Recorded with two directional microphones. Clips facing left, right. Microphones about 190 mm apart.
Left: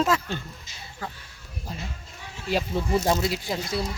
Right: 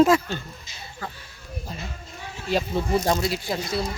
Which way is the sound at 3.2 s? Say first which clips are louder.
Right 1 dB; 15° left (ahead or behind).